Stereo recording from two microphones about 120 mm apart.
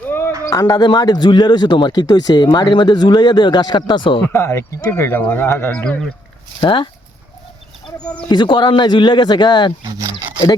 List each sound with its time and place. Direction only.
0.4 s speech: 30° left (ahead or behind)
4.2 s speech: 20° left (ahead or behind)
6.6 s speech: 45° left (ahead or behind)
8.0 s speech: 10° left (ahead or behind)
8.3 s speech: 40° left (ahead or behind)
9.8 s speech: 35° right (ahead or behind)